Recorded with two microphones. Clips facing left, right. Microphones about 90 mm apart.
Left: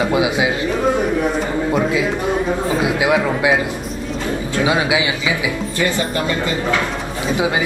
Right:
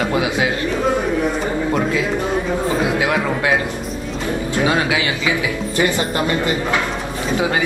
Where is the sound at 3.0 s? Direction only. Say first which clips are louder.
Left 2 dB; 15° left (ahead or behind).